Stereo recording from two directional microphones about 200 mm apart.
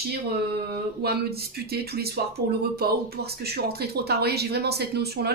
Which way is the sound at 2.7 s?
50° right (ahead or behind).